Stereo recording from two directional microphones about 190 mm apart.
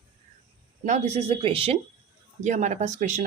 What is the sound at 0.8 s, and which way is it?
Speech, 35° right (ahead or behind).